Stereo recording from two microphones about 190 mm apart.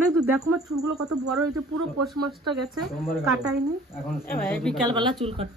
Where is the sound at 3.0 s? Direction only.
5° right (ahead or behind).